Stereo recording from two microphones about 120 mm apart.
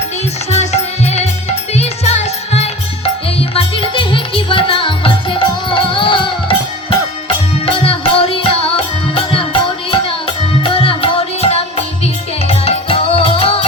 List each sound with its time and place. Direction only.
0.5 s music: 65° left (ahead or behind)
3.5 s music: 50° left (ahead or behind)
7.6 s music: 50° left (ahead or behind)